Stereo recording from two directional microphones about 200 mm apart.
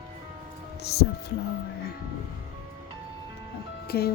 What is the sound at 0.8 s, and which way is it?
Music, 55° left (ahead or behind).